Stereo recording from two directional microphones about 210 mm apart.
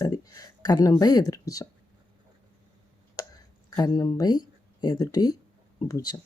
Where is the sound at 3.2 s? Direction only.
20° left (ahead or behind).